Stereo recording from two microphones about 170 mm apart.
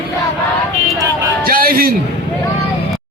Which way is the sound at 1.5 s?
60° right (ahead or behind).